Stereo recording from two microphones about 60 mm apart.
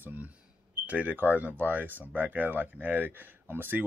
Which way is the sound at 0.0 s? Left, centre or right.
Right.